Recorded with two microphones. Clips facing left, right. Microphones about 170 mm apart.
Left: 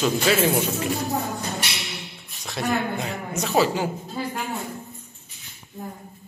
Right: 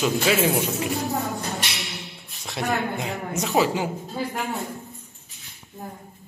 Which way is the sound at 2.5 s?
20° right (ahead or behind).